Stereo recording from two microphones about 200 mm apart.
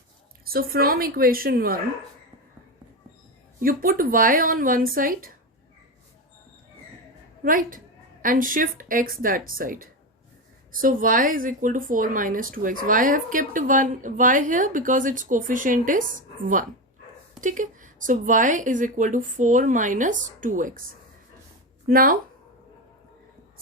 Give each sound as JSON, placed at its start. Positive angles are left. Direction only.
{"t": 0.4, "sound": "speech", "side_deg": -50}
{"t": 3.6, "sound": "speech", "side_deg": -45}
{"t": 7.4, "sound": "a woman's voice", "side_deg": -45}
{"t": 21.8, "sound": "speech", "side_deg": -45}